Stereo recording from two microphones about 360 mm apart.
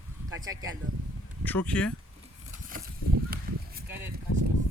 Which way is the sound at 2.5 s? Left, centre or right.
Right.